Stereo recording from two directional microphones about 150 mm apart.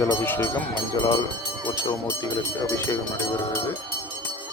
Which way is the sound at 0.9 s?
30° left (ahead or behind).